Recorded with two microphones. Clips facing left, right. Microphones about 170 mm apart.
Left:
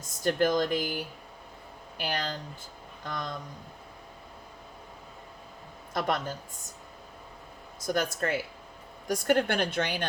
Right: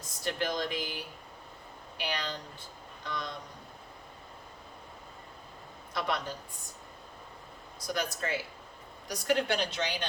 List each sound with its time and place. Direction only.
0.3 s a woman's voice: 50° left (ahead or behind)
5.9 s a woman's voice: 50° left (ahead or behind)
7.9 s a woman's voice: 55° left (ahead or behind)